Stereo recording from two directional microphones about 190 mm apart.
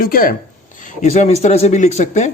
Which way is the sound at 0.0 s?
50° left (ahead or behind).